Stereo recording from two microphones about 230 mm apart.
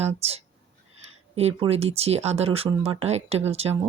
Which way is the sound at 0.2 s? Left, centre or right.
Right.